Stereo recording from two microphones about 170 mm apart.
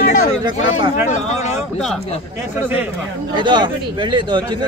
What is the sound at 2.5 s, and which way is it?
Speech, 10° right (ahead or behind).